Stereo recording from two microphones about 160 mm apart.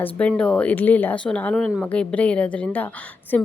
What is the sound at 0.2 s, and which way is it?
Speech, 5° left (ahead or behind).